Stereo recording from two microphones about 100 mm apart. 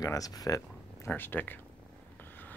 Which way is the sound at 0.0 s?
35° left (ahead or behind).